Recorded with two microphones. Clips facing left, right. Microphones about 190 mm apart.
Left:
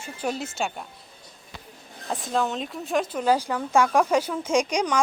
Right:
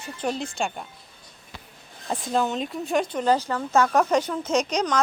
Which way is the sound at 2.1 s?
Centre (ahead or behind).